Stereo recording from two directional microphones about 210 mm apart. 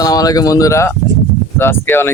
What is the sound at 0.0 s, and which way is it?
Speech, 15° left (ahead or behind).